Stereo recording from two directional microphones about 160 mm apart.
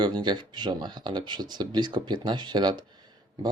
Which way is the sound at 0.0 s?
30° right (ahead or behind).